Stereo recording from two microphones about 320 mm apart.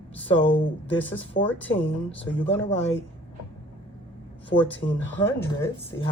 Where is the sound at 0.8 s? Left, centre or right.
Left.